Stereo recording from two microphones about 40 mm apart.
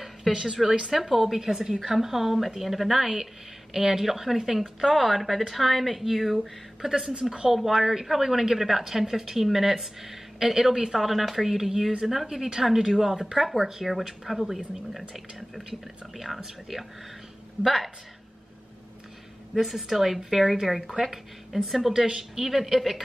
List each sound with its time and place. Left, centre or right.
0.3 s a woman's voice: centre
11.0 s a woman's voice: centre
19.5 s a woman's voice: centre